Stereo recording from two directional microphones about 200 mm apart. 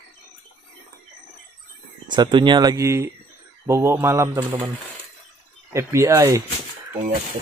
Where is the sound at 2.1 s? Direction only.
25° right (ahead or behind).